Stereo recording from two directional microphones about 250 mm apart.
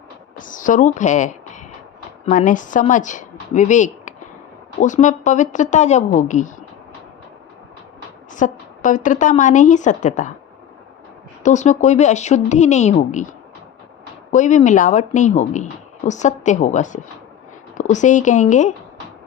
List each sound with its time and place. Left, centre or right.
0.3 s a woman's voice: left
8.3 s a woman's voice: left
11.4 s a woman's voice: left
14.3 s a woman's voice: left